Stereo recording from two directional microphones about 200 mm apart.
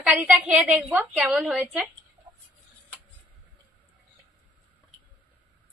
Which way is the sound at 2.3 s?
10° right (ahead or behind).